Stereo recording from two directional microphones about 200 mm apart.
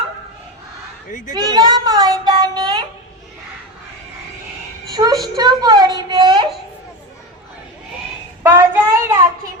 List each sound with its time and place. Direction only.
1.3 s a sound: 20° right (ahead or behind)
4.9 s a woman's voice: 20° right (ahead or behind)
8.4 s child singing: 15° right (ahead or behind)